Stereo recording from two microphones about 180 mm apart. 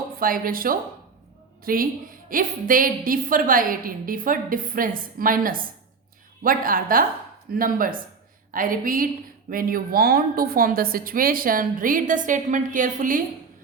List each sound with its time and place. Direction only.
0.2 s a woman's voice: 55° right (ahead or behind)